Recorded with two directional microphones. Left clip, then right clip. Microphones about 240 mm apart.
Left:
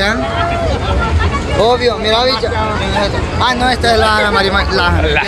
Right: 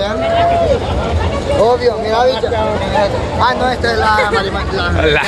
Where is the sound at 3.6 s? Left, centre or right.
Left.